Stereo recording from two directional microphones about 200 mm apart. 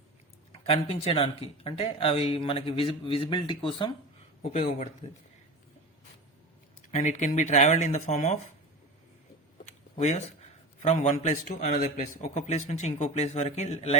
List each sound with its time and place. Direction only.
0.7 s a man's voice: 30° left (ahead or behind)
6.9 s a man's voice: 35° left (ahead or behind)
9.6 s a sound: 35° left (ahead or behind)
10.8 s a man's voice: 35° left (ahead or behind)